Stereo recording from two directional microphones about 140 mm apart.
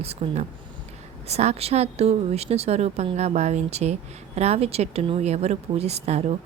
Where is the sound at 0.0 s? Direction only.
45° right (ahead or behind).